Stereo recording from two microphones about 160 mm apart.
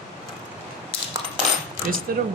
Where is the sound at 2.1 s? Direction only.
65° right (ahead or behind).